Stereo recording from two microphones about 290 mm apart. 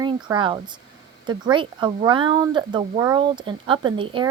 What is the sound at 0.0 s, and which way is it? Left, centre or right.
Speech, centre.